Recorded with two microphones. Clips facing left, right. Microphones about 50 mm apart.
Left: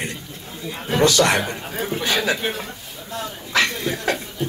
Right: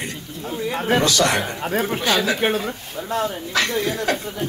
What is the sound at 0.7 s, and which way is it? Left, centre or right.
Chatter, right.